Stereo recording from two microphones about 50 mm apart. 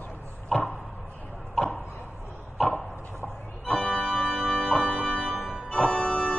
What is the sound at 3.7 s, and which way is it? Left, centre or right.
Organ, left.